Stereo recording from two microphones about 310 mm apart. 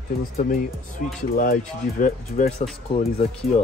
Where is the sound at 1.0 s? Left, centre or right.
Left.